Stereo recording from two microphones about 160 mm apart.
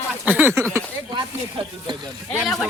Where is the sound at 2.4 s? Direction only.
Centre (ahead or behind).